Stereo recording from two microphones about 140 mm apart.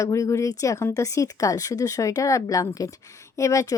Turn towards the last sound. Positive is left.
turn(degrees=25)  # may be behind; listen again after turning